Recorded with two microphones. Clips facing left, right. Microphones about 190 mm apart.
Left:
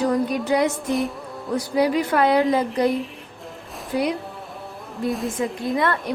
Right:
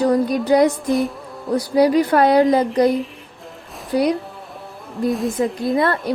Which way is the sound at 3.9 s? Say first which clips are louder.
Right 5 dB; 40° right (ahead or behind).